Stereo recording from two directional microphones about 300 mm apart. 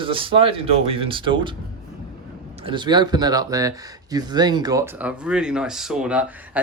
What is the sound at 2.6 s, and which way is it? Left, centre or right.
Speech, centre.